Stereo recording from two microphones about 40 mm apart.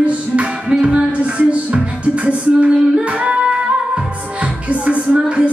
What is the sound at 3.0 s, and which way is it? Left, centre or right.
Music, right.